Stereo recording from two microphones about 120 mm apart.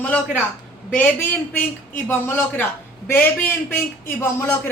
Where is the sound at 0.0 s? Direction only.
10° left (ahead or behind).